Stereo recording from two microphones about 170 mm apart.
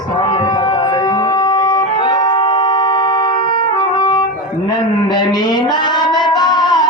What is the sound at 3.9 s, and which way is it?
Brass instrument, 25° left (ahead or behind).